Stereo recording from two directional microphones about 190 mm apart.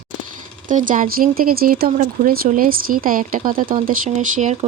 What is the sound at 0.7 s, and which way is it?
Speech, 45° right (ahead or behind).